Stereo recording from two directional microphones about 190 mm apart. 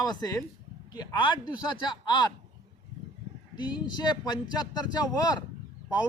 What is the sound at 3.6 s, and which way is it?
A man's voice, 20° left (ahead or behind).